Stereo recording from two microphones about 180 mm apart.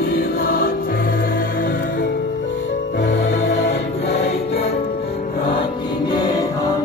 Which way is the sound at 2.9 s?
70° left (ahead or behind).